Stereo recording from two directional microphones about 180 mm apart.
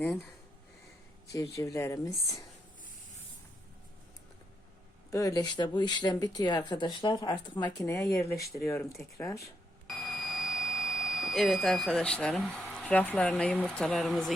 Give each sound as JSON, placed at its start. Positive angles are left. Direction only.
{"t": 1.3, "sound": "speech", "side_deg": 20}
{"t": 5.1, "sound": "speech", "side_deg": 20}
{"t": 9.8, "sound": "speech", "side_deg": 0}